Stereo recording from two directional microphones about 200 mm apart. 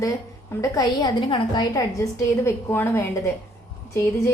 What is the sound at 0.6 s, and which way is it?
A woman's voice, 20° left (ahead or behind).